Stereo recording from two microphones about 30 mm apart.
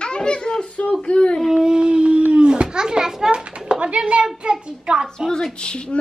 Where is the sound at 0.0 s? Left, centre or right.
Left.